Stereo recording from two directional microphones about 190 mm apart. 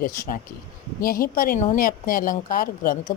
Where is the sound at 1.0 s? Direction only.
50° left (ahead or behind).